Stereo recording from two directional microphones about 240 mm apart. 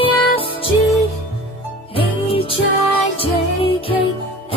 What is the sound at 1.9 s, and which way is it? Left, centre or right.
Music, left.